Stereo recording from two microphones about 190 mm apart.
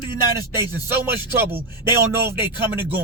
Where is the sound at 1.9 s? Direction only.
55° right (ahead or behind).